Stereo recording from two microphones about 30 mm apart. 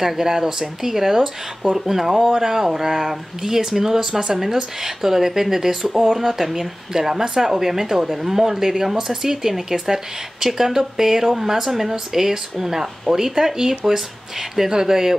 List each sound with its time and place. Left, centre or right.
0.0 s speech: centre